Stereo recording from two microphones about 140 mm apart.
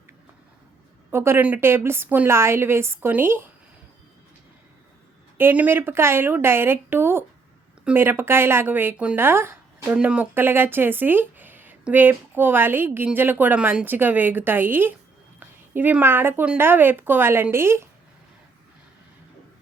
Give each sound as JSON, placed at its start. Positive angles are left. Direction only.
{"t": 1.1, "sound": "speech", "side_deg": -15}
{"t": 5.4, "sound": "speech", "side_deg": -15}